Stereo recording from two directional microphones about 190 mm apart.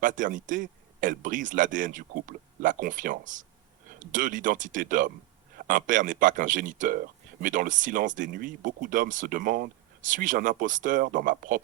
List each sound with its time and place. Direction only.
0.0 s speech: 45° right (ahead or behind)